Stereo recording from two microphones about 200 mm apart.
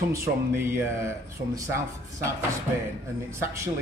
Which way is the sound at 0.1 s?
10° right (ahead or behind).